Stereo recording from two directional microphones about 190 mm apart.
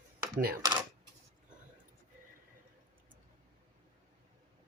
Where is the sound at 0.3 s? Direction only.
50° right (ahead or behind).